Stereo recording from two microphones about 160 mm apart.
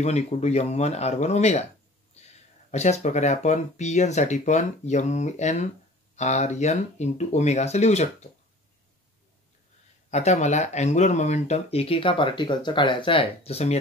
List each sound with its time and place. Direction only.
0.0 s speech: 45° left (ahead or behind)
2.7 s speech: 45° left (ahead or behind)
10.1 s speech: 45° left (ahead or behind)